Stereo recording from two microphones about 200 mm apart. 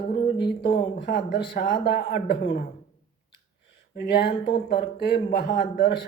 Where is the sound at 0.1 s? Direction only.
55° left (ahead or behind).